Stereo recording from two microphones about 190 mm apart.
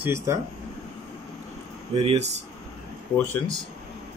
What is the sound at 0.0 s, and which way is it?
Speech, 15° right (ahead or behind).